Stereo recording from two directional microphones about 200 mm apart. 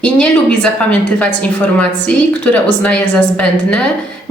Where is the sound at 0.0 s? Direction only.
5° left (ahead or behind).